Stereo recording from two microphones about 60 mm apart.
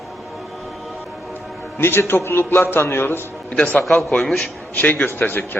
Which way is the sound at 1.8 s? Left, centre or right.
Left.